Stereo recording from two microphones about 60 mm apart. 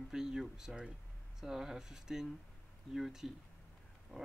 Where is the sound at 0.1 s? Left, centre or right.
Centre.